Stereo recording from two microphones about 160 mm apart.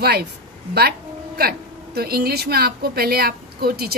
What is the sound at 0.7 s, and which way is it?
A woman's voice, 75° right (ahead or behind).